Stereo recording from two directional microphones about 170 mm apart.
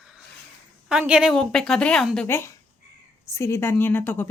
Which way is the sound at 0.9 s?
5° right (ahead or behind).